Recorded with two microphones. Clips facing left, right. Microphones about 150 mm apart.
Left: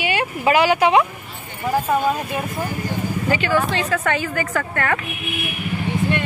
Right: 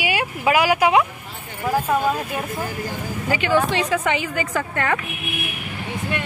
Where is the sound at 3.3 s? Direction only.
15° right (ahead or behind).